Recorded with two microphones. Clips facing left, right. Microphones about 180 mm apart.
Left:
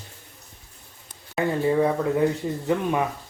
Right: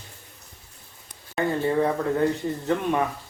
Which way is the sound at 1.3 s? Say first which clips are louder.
Left 1 dB; 10° left (ahead or behind).